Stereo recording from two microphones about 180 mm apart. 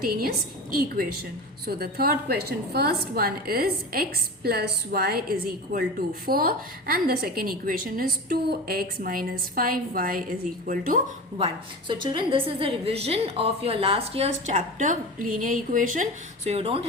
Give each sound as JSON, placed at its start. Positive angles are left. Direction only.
{"t": 0.0, "sound": "a woman's voice", "side_deg": -55}
{"t": 14.4, "sound": "a woman's voice", "side_deg": -45}